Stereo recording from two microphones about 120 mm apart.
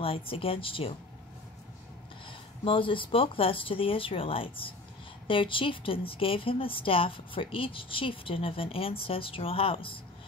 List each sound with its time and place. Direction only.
0.0 s a woman's voice: 50° left (ahead or behind)
2.2 s a woman's voice: 45° left (ahead or behind)